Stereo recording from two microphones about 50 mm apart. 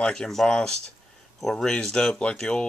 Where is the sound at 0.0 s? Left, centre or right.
Centre.